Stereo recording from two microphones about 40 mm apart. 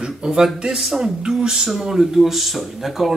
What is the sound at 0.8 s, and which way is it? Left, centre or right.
Speech, centre.